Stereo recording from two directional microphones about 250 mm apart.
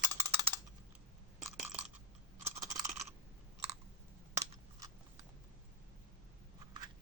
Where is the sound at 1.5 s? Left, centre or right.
Centre.